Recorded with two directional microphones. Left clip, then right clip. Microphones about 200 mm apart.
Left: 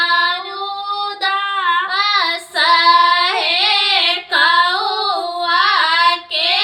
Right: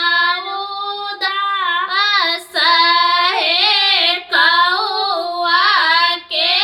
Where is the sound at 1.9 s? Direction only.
15° right (ahead or behind).